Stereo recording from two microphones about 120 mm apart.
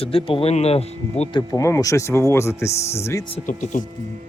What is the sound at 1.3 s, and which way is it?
Speech, 30° left (ahead or behind).